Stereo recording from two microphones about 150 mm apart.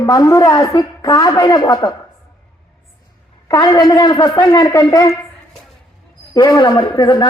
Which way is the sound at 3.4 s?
25° left (ahead or behind).